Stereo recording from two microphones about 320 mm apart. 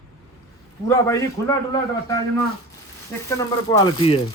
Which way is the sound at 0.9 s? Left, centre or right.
Centre.